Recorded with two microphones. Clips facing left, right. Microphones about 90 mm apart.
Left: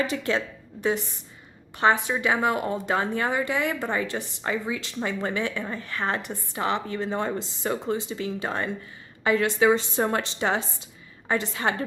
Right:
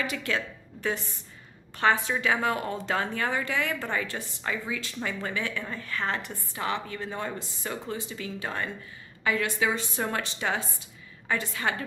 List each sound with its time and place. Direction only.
0.0 s a woman's voice: 30° left (ahead or behind)